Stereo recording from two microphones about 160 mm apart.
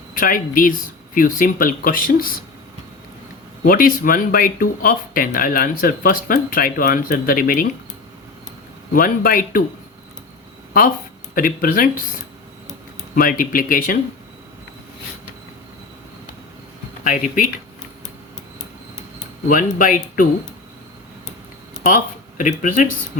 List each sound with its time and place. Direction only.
0.1 s speech: 60° left (ahead or behind)
3.6 s speech: 60° left (ahead or behind)
8.9 s speech: 60° left (ahead or behind)
11.3 s speech: 60° left (ahead or behind)
13.1 s speech: 60° left (ahead or behind)
17.0 s speech: 55° left (ahead or behind)
19.5 s speech: 60° left (ahead or behind)
21.8 s speech: 55° left (ahead or behind)